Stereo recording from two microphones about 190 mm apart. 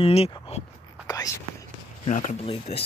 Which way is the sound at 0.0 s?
30° left (ahead or behind).